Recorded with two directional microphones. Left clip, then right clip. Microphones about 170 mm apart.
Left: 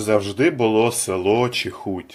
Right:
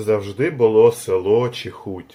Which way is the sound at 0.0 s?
30° left (ahead or behind).